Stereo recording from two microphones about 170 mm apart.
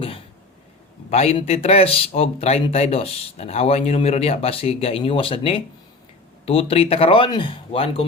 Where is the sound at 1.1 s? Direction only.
35° left (ahead or behind).